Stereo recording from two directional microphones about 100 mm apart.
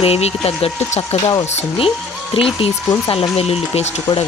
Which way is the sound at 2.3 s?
65° left (ahead or behind).